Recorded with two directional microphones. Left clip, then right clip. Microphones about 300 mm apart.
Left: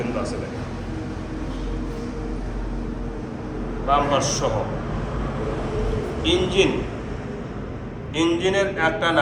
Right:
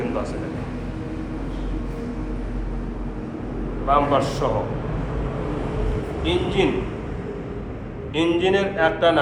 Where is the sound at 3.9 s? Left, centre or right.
Centre.